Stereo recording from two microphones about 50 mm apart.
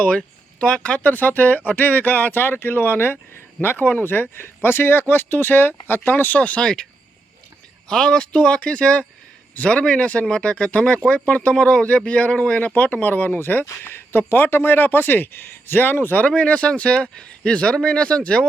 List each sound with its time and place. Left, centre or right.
0.6 s speech: left
6.6 s speech: centre
7.9 s speech: centre
12.7 s speech: left
16.2 s speech: left